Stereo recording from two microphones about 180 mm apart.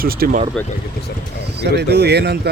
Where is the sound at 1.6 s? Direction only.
65° right (ahead or behind).